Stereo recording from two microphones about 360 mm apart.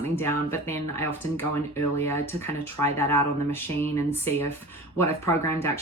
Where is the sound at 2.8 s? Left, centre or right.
Centre.